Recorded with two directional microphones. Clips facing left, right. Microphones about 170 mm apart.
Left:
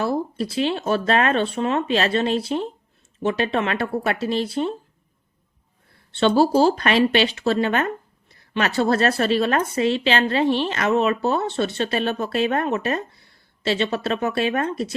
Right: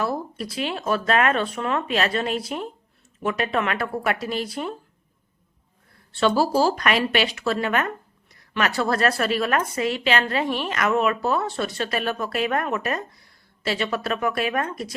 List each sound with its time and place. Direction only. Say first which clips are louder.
0.0 s speech: left 4 dB; 25° left (ahead or behind)
6.1 s speech: left 3 dB; 25° left (ahead or behind)